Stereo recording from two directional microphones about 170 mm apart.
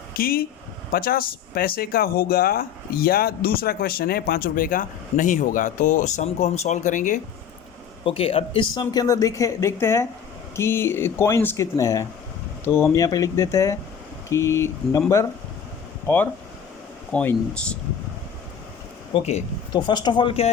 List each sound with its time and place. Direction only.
0.2 s speech: 60° left (ahead or behind)
8.0 s speech: 35° left (ahead or behind); by 15.0 s 15° left (ahead or behind)
16.0 s speech: 10° left (ahead or behind)
19.1 s speech: 40° left (ahead or behind)
19.7 s speech: 25° left (ahead or behind)